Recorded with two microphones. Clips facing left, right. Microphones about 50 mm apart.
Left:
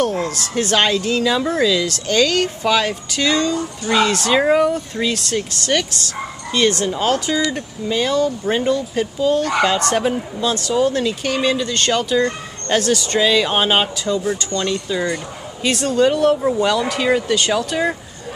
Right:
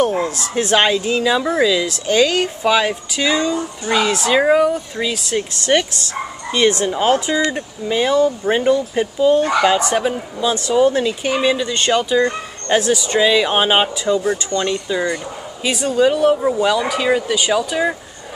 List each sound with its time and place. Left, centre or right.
0.0 s speech: right
4.3 s speech: centre
5.6 s speech: right
9.9 s speech: centre
10.4 s speech: centre